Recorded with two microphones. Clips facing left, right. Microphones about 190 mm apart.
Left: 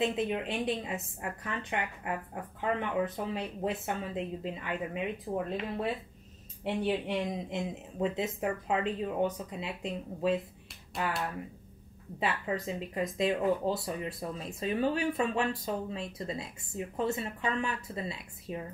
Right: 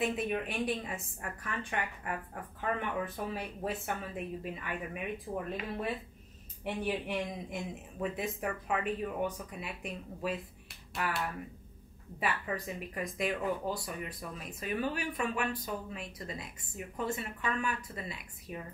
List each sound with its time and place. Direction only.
0.0 s speech: 20° left (ahead or behind)
6.6 s speech: 20° left (ahead or behind)
12.2 s speech: 25° left (ahead or behind)